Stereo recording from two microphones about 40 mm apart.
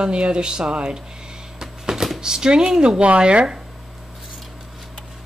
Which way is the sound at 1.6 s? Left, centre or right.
Centre.